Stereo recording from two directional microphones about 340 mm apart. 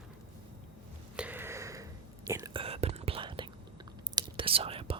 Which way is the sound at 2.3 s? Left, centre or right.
Centre.